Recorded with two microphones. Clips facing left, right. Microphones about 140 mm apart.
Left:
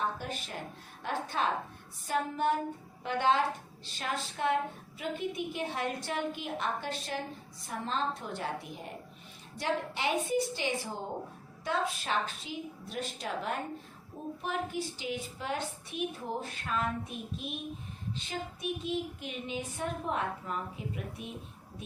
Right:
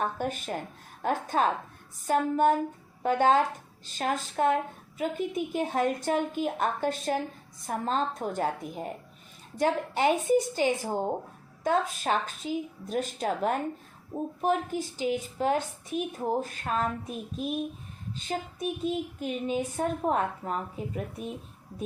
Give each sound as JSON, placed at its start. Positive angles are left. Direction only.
{"t": 0.0, "sound": "a woman's voice", "side_deg": -50}
{"t": 18.8, "sound": "a woman's voice", "side_deg": -45}